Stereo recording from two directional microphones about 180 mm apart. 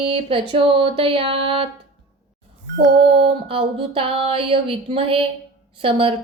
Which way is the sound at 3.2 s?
30° right (ahead or behind).